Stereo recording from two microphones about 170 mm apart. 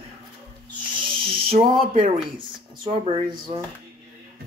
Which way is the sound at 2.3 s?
30° right (ahead or behind).